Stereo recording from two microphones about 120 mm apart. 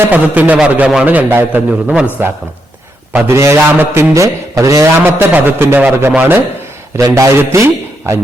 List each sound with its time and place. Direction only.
0.0 s a man's voice: 15° right (ahead or behind)
3.1 s a man's voice: 20° right (ahead or behind)